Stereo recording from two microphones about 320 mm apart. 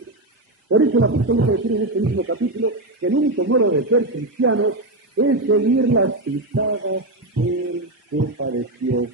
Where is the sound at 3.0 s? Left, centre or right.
Right.